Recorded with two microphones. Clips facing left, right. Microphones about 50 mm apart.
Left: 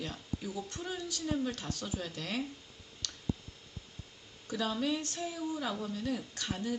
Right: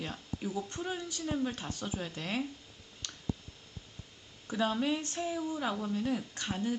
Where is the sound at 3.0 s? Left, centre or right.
Right.